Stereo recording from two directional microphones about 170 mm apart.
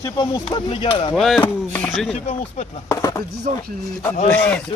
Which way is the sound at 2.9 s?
20° left (ahead or behind).